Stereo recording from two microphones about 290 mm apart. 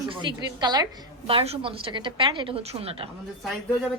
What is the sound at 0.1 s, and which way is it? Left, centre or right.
A woman's voice, centre.